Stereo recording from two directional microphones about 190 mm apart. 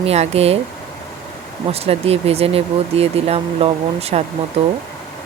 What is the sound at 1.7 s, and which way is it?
Speech, 30° right (ahead or behind).